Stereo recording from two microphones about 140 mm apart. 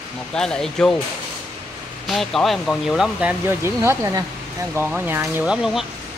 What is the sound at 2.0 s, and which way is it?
Speech, centre (ahead or behind).